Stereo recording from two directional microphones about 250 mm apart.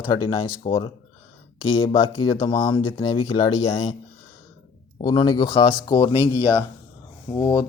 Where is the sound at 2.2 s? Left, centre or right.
Centre.